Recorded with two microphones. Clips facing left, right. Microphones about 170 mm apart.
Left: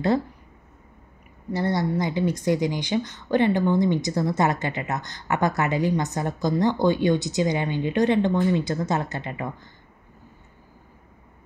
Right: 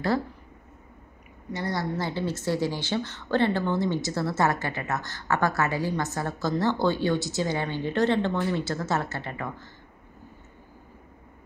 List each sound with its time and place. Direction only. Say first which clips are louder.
1.5 s a woman's voice: left 5 dB; 25° left (ahead or behind)